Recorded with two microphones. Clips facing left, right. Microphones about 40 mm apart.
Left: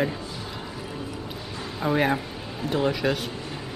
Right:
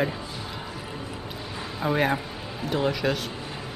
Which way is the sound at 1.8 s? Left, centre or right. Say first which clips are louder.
Left 1 dB; centre.